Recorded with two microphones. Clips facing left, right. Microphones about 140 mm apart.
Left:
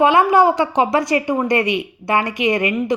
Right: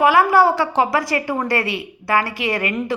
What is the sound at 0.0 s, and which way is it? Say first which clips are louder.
A woman's voice: left 1 dB; 20° left (ahead or behind).